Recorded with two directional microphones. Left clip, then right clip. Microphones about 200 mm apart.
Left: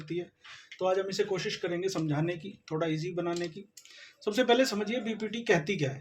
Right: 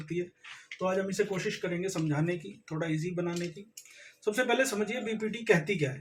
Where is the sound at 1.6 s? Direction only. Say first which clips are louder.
Left 1 dB; 50° left (ahead or behind).